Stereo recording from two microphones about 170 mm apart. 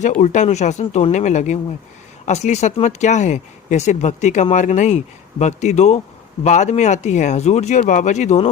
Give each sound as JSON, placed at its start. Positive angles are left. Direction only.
{"t": 0.0, "sound": "speech", "side_deg": 45}